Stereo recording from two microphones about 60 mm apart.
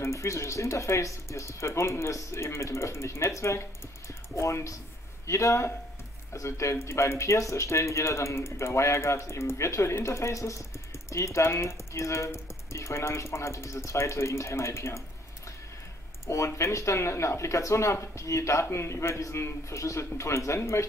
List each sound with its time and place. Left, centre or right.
0.0 s speech: left
16.3 s speech: left